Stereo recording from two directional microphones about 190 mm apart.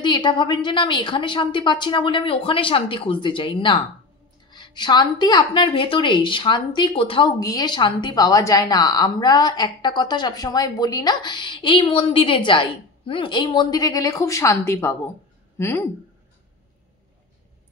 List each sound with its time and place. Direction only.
0.0 s a woman's voice: 25° left (ahead or behind)